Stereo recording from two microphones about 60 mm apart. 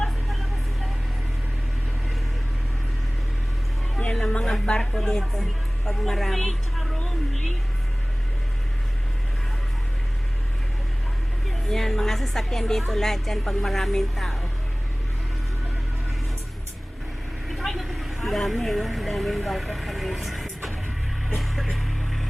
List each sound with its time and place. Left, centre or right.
4.1 s music: centre
4.6 s a woman's voice: centre
11.7 s speech: centre
17.5 s vehicle: centre
18.6 s speech: centre
21.2 s vehicle: centre